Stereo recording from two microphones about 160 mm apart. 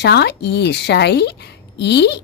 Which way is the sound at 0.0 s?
90° left.